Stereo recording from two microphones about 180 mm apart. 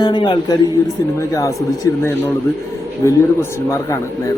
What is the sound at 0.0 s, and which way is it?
A man's voice, 25° left (ahead or behind).